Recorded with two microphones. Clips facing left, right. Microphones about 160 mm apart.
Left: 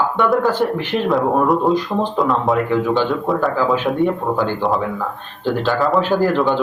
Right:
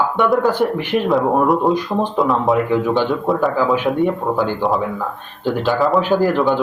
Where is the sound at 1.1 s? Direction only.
Centre (ahead or behind).